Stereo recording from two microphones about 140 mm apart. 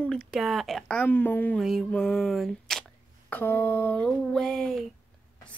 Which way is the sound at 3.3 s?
15° left (ahead or behind).